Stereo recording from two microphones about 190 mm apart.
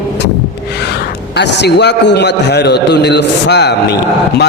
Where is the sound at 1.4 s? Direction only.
65° left (ahead or behind).